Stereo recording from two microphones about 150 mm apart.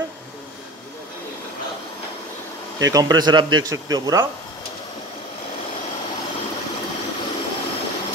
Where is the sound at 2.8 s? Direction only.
25° right (ahead or behind).